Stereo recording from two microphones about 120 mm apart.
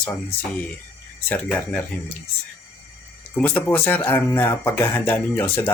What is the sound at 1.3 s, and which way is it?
Speech, 15° left (ahead or behind).